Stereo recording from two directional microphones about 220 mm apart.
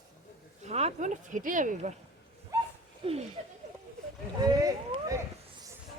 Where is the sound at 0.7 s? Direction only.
30° right (ahead or behind).